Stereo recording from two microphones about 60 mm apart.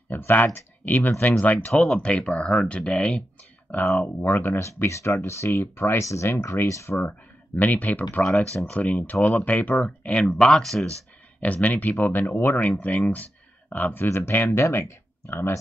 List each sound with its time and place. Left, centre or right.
0.1 s speech: left
1.7 s speech: centre
2.0 s speech: left
4.6 s speech: left
5.6 s speech: left
5.9 s speech: left
6.9 s speech: left; by 10.9 s centre
11.4 s speech: left